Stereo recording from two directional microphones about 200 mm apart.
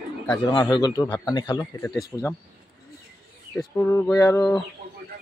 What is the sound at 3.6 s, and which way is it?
Speech, 15° left (ahead or behind).